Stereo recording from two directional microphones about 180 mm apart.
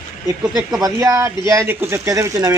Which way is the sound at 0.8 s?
20° right (ahead or behind).